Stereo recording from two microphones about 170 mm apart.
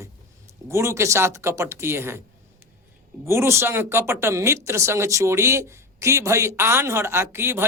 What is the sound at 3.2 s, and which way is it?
Speech, 15° right (ahead or behind).